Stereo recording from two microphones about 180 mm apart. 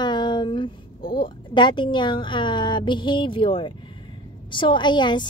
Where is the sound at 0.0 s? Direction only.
25° left (ahead or behind).